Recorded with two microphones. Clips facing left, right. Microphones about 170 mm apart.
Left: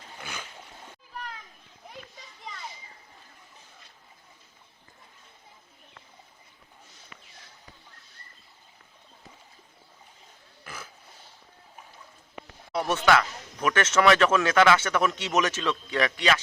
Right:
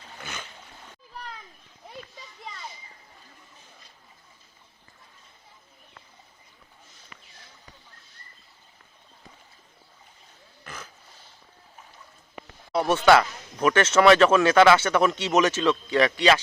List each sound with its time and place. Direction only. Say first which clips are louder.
0.2 s a sound: right 1 dB; 10° left (ahead or behind)
10.6 s pig: right 1 dB; 10° left (ahead or behind)
12.7 s speech: right 4 dB; 30° right (ahead or behind)